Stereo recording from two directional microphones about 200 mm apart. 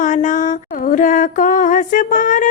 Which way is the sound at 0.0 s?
40° left (ahead or behind).